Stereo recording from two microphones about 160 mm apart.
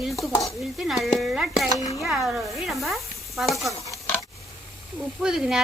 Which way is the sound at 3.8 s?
20° left (ahead or behind).